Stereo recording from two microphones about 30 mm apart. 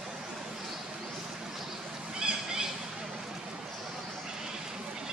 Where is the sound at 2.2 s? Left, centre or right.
Right.